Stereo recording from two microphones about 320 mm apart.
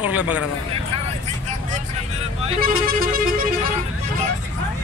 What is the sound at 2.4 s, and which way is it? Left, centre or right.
Speech, right.